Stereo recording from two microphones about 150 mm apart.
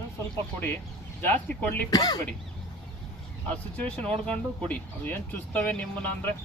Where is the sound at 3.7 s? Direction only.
10° left (ahead or behind).